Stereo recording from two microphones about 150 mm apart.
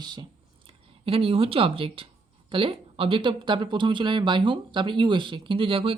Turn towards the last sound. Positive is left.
turn(degrees=-35)  # may be behind; listen again after turning